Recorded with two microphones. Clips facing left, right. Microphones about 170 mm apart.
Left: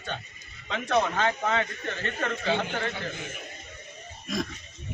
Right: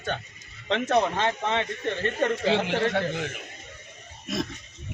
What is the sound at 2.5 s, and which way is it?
Speech, 80° right.